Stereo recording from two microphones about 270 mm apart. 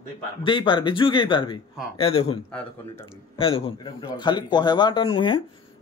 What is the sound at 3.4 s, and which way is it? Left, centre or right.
Speech, centre.